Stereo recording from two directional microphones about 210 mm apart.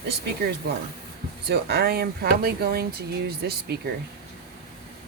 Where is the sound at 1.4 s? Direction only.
50° right (ahead or behind).